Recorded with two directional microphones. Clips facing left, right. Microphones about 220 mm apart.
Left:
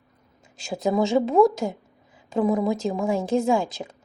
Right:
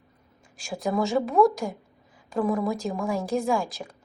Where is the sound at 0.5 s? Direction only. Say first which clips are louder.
Left 4 dB; 20° left (ahead or behind).